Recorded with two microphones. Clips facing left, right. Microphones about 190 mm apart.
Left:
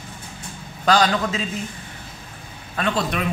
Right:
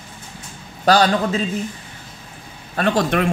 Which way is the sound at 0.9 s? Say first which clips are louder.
Right 3 dB; 35° right (ahead or behind).